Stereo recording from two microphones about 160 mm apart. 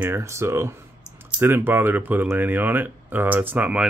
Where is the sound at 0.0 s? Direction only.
15° right (ahead or behind).